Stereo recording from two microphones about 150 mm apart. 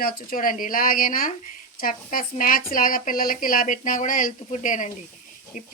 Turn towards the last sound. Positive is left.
turn(degrees=60)  # may be behind; listen again after turning